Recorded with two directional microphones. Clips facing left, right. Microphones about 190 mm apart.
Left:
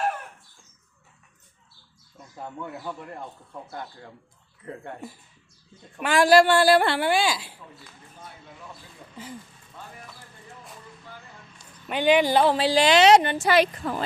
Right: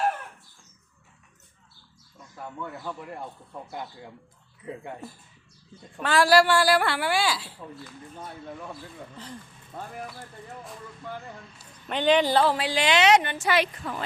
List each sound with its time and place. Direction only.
2.3 s speech: 20° left (ahead or behind)
2.8 s speech: 5° right (ahead or behind)
6.0 s a woman's voice: 15° left (ahead or behind)
9.1 s speech: 5° left (ahead or behind)
9.7 s speech: 55° right (ahead or behind)
11.9 s speech: 10° left (ahead or behind)
12.5 s a woman's voice: 35° left (ahead or behind)